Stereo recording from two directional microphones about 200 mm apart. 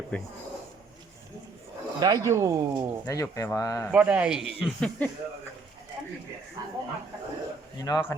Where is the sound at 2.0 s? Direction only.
20° right (ahead or behind).